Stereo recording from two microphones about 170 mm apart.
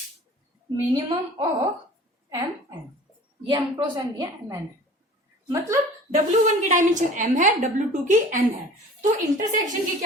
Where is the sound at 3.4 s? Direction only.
25° right (ahead or behind).